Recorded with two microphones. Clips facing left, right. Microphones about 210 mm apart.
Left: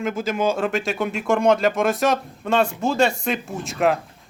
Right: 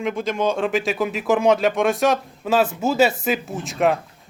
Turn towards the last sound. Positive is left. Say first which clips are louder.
# right 1 dB
turn(degrees=0)  # may be behind; listen again after turning